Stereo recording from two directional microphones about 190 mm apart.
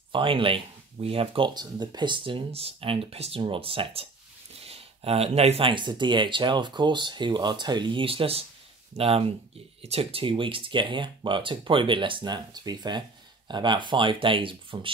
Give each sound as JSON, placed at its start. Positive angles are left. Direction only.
{"t": 0.1, "sound": "speech", "side_deg": -25}